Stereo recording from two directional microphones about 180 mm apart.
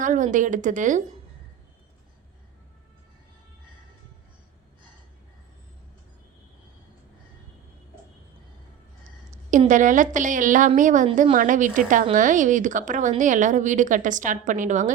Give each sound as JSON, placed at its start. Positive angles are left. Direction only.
{"t": 0.0, "sound": "speech", "side_deg": -45}
{"t": 9.3, "sound": "speech", "side_deg": -45}